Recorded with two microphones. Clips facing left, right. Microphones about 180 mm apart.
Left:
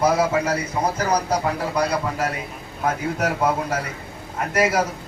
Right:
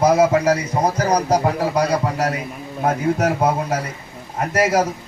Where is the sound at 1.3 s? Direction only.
40° right (ahead or behind).